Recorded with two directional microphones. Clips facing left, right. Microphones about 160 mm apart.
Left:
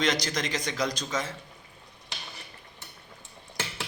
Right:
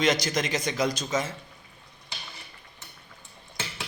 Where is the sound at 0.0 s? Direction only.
10° right (ahead or behind).